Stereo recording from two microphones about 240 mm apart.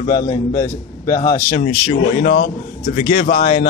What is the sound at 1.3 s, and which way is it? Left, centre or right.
Speech, left.